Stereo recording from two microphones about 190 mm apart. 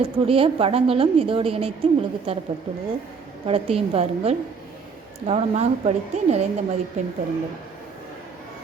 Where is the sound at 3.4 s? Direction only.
30° right (ahead or behind).